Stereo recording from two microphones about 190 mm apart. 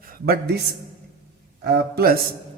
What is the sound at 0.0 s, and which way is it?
Speech, 50° right (ahead or behind).